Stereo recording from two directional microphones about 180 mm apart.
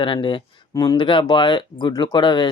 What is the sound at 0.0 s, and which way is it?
Speech, 25° left (ahead or behind).